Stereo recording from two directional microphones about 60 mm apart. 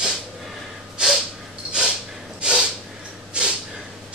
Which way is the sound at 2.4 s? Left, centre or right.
Centre.